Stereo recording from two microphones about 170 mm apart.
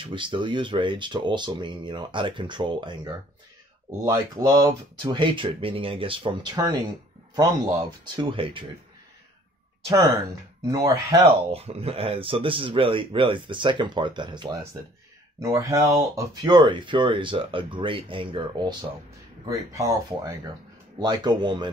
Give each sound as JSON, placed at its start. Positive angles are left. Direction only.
{"t": 0.0, "sound": "speech", "side_deg": -30}
{"t": 8.0, "sound": "speech", "side_deg": -30}
{"t": 9.8, "sound": "speech", "side_deg": -20}
{"t": 11.2, "sound": "speech", "side_deg": -35}